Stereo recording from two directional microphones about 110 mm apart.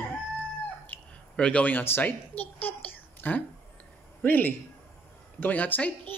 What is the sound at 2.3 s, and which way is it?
Speech, 65° left (ahead or behind).